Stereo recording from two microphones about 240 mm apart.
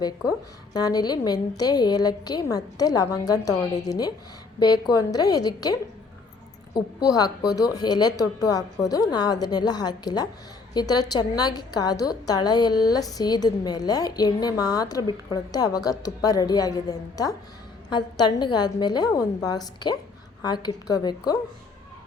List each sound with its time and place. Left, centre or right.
0.0 s a woman's voice: centre